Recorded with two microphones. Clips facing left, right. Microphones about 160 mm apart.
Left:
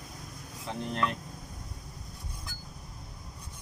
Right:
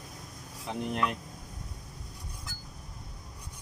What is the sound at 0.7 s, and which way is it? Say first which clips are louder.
Speech: right 1 dB; 15° right (ahead or behind).